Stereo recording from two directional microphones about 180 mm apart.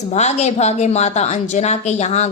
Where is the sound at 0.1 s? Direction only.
40° left (ahead or behind).